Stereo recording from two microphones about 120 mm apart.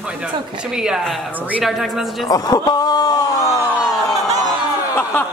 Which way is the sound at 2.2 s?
30° left (ahead or behind).